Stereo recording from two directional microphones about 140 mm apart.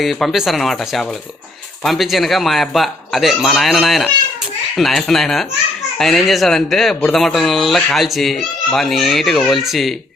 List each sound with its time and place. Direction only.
0.0 s speech: centre (ahead or behind)